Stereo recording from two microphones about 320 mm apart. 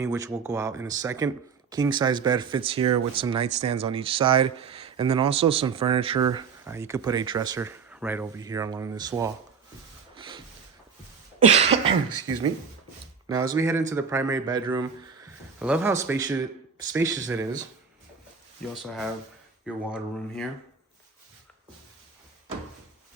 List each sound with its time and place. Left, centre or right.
0.0 s speech: centre
10.2 s rub: centre
11.4 s speech: centre
18.7 s speech: centre